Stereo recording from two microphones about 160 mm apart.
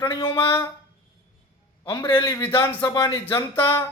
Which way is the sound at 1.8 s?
30° left (ahead or behind).